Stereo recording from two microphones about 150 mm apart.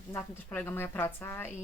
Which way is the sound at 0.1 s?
10° left (ahead or behind).